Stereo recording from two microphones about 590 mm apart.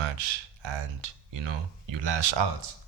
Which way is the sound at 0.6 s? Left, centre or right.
Right.